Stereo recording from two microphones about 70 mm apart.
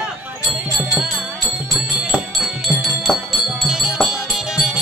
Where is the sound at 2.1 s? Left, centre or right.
Centre.